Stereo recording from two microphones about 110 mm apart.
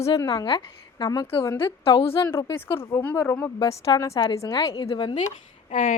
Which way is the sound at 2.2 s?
25° left (ahead or behind).